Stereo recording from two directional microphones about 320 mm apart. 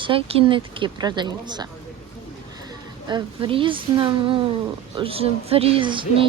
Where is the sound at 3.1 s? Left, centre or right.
Centre.